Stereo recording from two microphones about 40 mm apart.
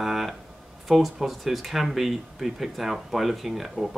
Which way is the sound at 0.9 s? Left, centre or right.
Centre.